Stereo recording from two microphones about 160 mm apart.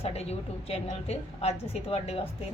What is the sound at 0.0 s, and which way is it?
A woman's voice, 40° left (ahead or behind).